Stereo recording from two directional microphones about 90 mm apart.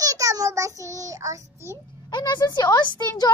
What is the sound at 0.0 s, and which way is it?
A child's voice, 40° right (ahead or behind).